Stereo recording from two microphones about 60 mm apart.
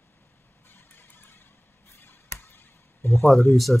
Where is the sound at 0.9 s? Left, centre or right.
Left.